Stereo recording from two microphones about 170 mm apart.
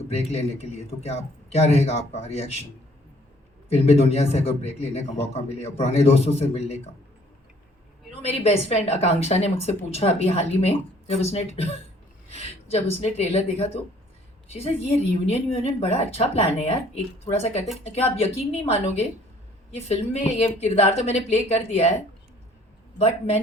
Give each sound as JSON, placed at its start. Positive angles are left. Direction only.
{"t": 0.1, "sound": "speech", "side_deg": 35}
{"t": 3.7, "sound": "speech", "side_deg": 35}
{"t": 8.2, "sound": "speech", "side_deg": 40}
{"t": 23.0, "sound": "speech", "side_deg": 40}